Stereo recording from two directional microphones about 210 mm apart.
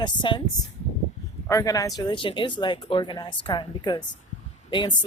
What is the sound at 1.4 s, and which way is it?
Speech, 15° left (ahead or behind).